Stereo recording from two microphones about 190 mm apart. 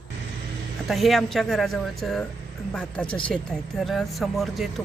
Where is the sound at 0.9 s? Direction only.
Centre (ahead or behind).